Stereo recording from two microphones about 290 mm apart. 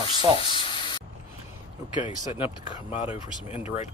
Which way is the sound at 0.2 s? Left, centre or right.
Centre.